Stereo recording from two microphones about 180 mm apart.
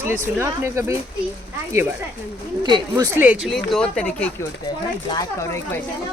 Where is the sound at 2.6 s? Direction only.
25° right (ahead or behind).